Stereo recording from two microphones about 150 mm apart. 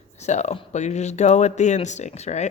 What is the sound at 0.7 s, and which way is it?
A woman's voice, 50° left (ahead or behind).